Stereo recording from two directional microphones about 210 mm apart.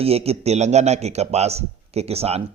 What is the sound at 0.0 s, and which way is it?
A man's voice, 30° right (ahead or behind).